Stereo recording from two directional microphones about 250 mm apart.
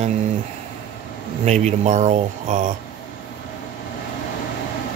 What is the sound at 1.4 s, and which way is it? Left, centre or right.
Speech, right.